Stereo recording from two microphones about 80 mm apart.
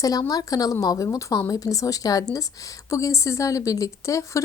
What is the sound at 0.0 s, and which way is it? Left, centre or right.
A woman's voice, left.